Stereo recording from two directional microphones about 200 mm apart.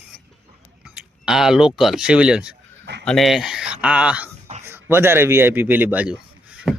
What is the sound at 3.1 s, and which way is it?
A man's voice, centre (ahead or behind).